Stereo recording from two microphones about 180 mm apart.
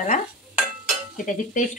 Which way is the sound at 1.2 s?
45° left (ahead or behind).